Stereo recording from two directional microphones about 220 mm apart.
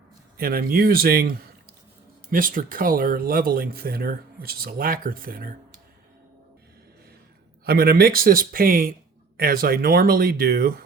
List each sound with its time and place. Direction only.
0.3 s speech: 40° right (ahead or behind)
7.6 s speech: 45° right (ahead or behind)